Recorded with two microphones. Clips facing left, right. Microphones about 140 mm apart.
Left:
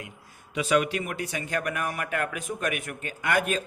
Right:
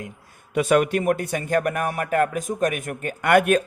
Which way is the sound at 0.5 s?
50° right (ahead or behind).